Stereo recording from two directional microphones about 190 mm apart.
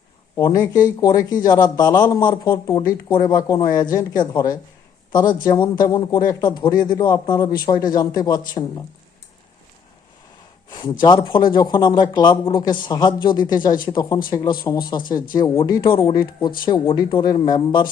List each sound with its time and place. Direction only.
0.3 s a man's voice: 20° left (ahead or behind)
10.7 s a sound: 20° left (ahead or behind)
11.0 s a man's voice: 25° left (ahead or behind)